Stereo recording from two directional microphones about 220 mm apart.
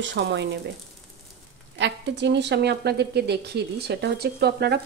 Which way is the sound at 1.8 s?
50° right (ahead or behind).